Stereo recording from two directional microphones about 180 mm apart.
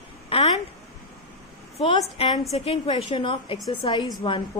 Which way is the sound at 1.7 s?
30° left (ahead or behind).